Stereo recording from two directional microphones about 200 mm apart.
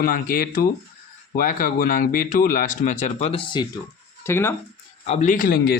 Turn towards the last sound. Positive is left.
turn(degrees=45)  # may be behind; listen again after turning